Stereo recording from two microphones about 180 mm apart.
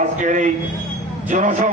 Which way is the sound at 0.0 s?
45° right (ahead or behind).